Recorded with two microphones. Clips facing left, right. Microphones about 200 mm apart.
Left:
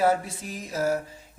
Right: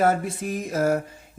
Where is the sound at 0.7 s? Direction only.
55° right (ahead or behind).